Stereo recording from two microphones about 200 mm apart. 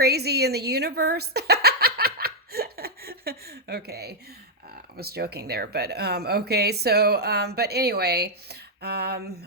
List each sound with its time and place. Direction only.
0.0 s speech: 55° right (ahead or behind)